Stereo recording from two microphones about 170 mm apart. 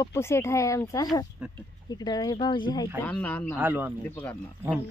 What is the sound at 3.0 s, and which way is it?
Speech, 10° left (ahead or behind).